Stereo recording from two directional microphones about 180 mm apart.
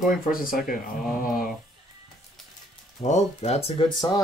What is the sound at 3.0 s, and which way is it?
Speech, 35° left (ahead or behind).